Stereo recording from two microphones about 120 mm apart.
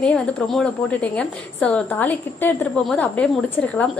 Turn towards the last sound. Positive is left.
turn(degrees=10)  # may be behind; listen again after turning